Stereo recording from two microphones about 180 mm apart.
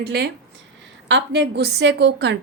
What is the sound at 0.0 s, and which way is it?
A woman's voice, 65° right (ahead or behind).